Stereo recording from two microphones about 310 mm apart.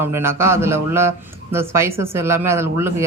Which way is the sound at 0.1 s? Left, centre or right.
Centre.